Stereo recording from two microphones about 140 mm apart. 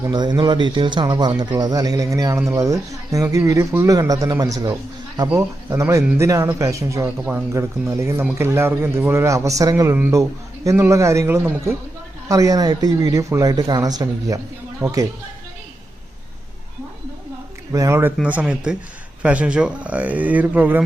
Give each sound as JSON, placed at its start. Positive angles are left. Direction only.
{"t": 0.1, "sound": "a man's voice", "side_deg": -30}
{"t": 17.7, "sound": "speech", "side_deg": -20}